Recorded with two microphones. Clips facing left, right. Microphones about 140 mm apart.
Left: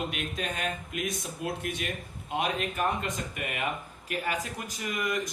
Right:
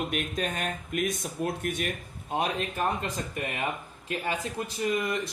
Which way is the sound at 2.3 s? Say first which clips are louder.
Right 1 dB; 35° right (ahead or behind).